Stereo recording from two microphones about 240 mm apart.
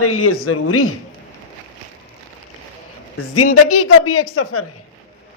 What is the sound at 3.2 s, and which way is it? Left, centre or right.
A woman's voice, left.